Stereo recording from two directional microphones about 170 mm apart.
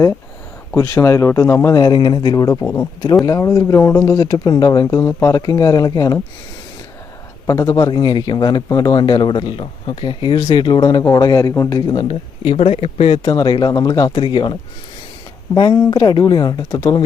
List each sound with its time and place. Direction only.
0.8 s speech: 15° left (ahead or behind)
7.4 s speech: 20° left (ahead or behind)
12.0 s speech: 40° left (ahead or behind)